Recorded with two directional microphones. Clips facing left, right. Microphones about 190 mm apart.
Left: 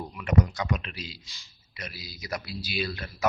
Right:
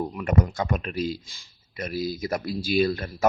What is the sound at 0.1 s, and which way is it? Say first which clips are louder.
A man's voice: right 2 dB; 45° right (ahead or behind).